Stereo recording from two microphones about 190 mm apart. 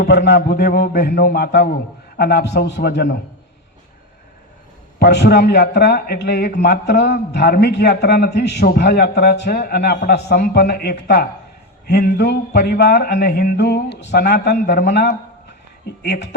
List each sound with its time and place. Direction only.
0.0 s a man's voice: 60° left (ahead or behind)
4.9 s a man's voice: 60° left (ahead or behind)